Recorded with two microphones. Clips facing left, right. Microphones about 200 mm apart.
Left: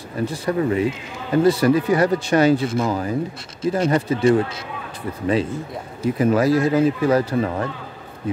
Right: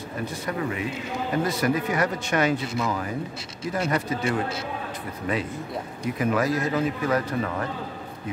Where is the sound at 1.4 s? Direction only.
30° left (ahead or behind).